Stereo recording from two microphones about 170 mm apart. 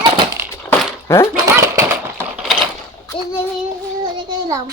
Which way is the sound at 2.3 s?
5° right (ahead or behind).